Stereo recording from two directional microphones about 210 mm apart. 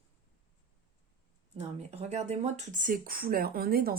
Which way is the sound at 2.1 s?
30° right (ahead or behind).